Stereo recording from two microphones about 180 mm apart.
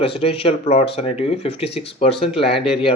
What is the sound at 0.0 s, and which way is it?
Speech, 30° left (ahead or behind).